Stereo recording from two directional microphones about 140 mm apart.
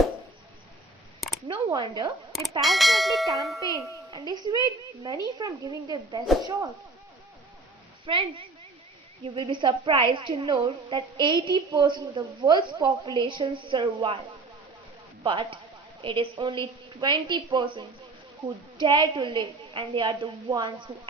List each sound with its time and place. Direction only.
1.5 s a woman's voice: 30° right (ahead or behind)
2.6 s a sound: centre (ahead or behind)
4.1 s a child's voice: 30° right (ahead or behind)
8.0 s a woman's voice: 40° right (ahead or behind)
15.2 s a woman's voice: 35° right (ahead or behind)